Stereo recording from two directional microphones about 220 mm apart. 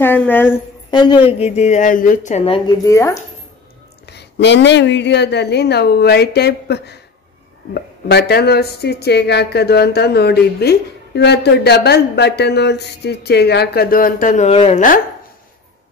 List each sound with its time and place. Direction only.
0.0 s a woman's voice: 10° left (ahead or behind)
4.0 s speech: 50° left (ahead or behind); by 15.0 s 30° left (ahead or behind)